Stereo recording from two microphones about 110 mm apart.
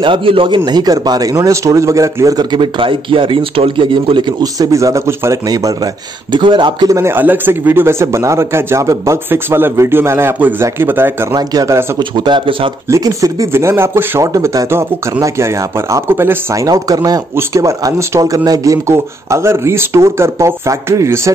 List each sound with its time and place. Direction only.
0.0 s a man's voice: 50° right (ahead or behind)
0.7 s a man's voice: 40° right (ahead or behind)
6.3 s a man's voice: 45° right (ahead or behind)
6.9 s a man's voice: 25° right (ahead or behind)
11.3 s a man's voice: 35° right (ahead or behind)
12.0 s a man's voice: 45° right (ahead or behind)
12.9 s a man's voice: 30° right (ahead or behind)
16.6 s a man's voice: 35° right (ahead or behind)